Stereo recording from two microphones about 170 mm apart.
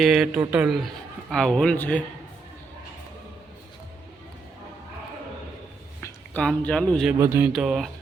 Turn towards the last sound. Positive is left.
turn(degrees=0)  # may be behind; listen again after turning